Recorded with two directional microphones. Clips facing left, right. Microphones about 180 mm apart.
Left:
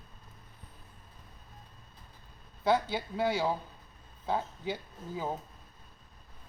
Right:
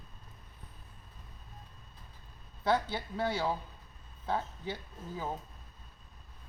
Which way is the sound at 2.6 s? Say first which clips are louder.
Left 2 dB; 10° left (ahead or behind).